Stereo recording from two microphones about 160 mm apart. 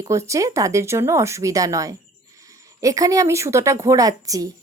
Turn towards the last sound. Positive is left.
turn(degrees=-20)  # may be behind; listen again after turning